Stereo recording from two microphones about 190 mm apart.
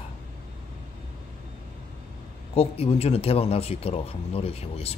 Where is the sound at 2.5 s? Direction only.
30° left (ahead or behind).